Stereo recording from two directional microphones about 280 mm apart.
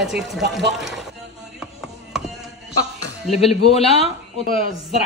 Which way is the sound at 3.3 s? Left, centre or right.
Left.